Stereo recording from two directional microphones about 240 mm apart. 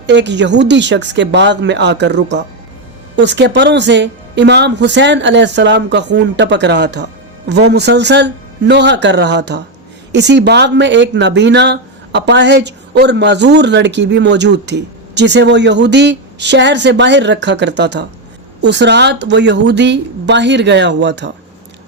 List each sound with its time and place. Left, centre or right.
0.1 s speech: right